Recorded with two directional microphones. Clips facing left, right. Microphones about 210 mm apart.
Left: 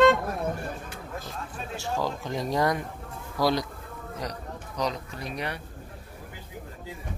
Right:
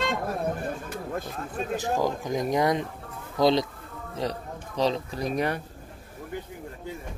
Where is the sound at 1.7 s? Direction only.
15° right (ahead or behind); by 5.5 s 45° right (ahead or behind).